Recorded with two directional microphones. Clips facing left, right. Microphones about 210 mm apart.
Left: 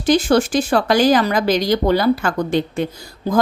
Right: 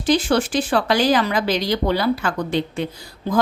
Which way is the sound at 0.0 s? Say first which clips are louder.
Left 3 dB; 45° left (ahead or behind).